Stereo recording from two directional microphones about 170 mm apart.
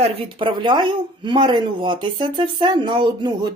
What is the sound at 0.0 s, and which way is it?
Speech, 30° right (ahead or behind).